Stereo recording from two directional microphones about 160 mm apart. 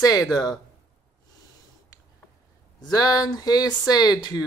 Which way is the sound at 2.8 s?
25° left (ahead or behind).